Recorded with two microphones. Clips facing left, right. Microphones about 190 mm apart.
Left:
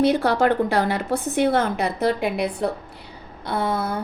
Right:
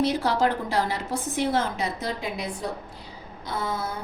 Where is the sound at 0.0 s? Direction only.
60° left (ahead or behind).